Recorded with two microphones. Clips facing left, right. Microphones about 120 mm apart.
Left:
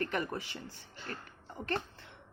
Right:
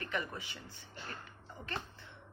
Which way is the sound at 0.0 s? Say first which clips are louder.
Left 5 dB; 45° left (ahead or behind).